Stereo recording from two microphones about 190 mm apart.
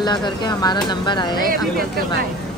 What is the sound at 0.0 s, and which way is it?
Speech, 25° left (ahead or behind).